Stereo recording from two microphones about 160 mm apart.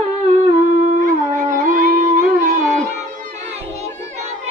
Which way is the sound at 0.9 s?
60° right (ahead or behind).